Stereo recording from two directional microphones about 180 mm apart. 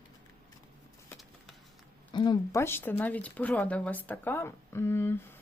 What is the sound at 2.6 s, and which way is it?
Speech, 10° left (ahead or behind).